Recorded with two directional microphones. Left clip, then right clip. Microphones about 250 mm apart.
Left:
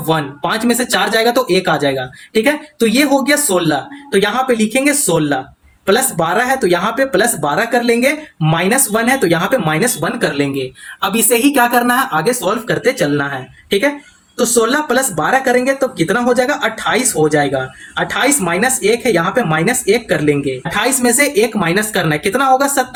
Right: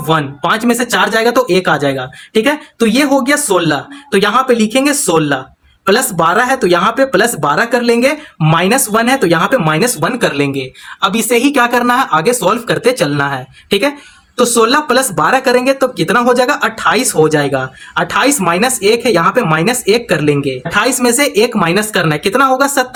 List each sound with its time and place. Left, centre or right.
0.1 s speech: right
14.3 s speech: right